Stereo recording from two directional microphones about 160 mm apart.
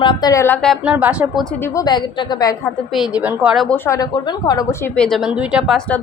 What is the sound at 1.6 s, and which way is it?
Speech, 20° left (ahead or behind).